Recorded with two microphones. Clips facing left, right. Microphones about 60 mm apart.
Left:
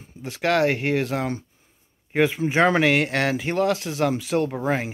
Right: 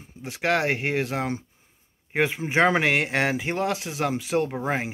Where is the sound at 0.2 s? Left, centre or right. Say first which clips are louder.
Left 3 dB; centre.